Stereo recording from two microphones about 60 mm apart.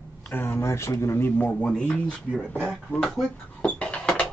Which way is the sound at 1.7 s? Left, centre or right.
Centre.